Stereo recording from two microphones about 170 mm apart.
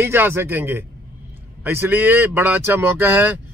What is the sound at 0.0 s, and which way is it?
Speech, 15° right (ahead or behind).